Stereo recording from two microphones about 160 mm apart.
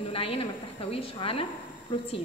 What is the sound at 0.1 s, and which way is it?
A woman's voice, 35° left (ahead or behind).